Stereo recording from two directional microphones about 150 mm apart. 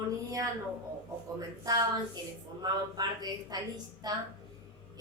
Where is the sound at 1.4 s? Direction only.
25° right (ahead or behind).